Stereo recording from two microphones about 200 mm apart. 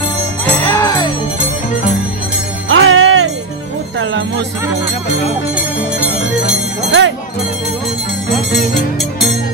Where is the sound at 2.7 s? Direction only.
75° right (ahead or behind).